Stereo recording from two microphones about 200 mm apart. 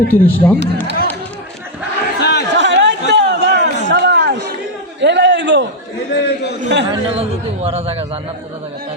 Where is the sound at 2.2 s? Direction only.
55° left (ahead or behind).